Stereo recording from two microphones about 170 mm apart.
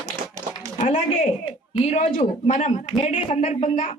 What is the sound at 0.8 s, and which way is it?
A man's voice, 45° left (ahead or behind).